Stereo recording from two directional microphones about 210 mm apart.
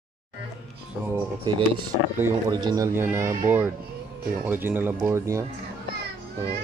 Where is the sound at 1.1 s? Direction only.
20° right (ahead or behind).